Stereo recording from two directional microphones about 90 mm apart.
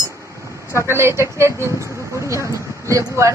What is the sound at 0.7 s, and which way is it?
Speech, 30° right (ahead or behind).